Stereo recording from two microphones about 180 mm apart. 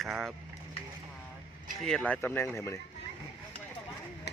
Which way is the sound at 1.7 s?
5° left (ahead or behind).